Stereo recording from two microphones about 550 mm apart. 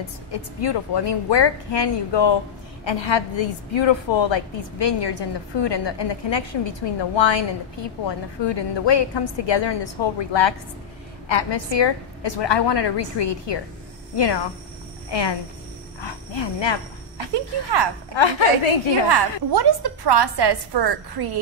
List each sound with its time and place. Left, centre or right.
0.3 s a woman's voice: left
8.5 s a woman's voice: left
17.3 s a woman's voice: right
18.1 s a woman's voice: left
19.5 s a woman's voice: right